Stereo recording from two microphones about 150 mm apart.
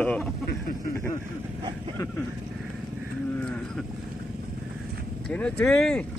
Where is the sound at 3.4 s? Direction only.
5° left (ahead or behind).